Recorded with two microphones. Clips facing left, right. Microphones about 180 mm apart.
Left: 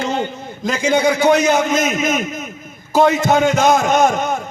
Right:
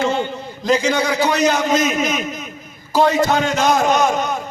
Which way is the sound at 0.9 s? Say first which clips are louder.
Left 4 dB; 50° left (ahead or behind).